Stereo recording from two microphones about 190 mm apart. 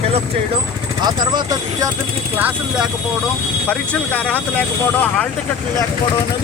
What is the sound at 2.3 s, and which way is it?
Speech, 10° right (ahead or behind).